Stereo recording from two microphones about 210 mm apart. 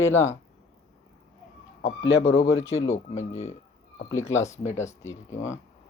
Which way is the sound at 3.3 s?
30° left (ahead or behind).